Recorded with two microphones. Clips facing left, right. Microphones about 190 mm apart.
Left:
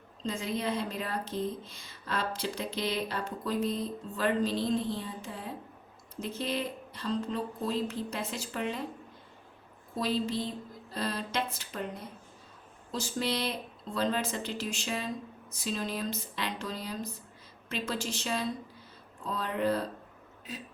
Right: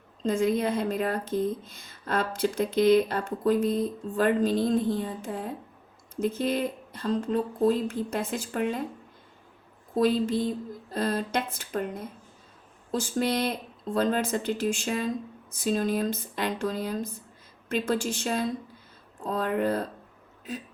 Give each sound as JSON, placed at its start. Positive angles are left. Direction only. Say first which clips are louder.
{"t": 0.2, "sound": "speech", "louder": "right 9 dB", "side_deg": -50}
{"t": 9.9, "sound": "speech", "louder": "right 7 dB", "side_deg": -50}